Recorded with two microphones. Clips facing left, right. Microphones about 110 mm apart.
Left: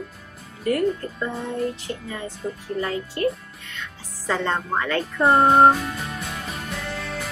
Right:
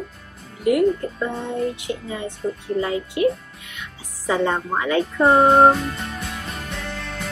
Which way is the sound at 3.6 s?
10° right (ahead or behind).